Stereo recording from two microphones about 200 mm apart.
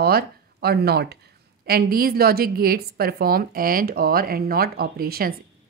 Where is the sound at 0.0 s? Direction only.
50° right (ahead or behind).